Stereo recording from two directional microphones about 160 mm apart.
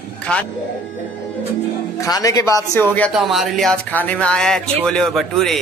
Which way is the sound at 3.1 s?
5° right (ahead or behind).